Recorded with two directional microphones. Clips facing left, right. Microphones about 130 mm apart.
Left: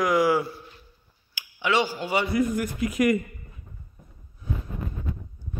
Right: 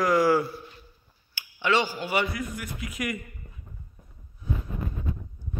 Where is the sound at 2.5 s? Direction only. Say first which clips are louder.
Left 10 dB; 40° left (ahead or behind).